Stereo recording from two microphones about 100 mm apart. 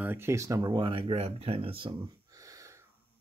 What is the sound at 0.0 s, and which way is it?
Mantra, 20° right (ahead or behind).